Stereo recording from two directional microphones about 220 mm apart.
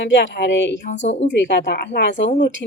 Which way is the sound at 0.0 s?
50° left (ahead or behind).